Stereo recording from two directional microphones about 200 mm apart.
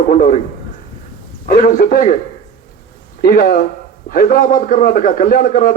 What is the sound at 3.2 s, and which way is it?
A man's voice, 45° left (ahead or behind).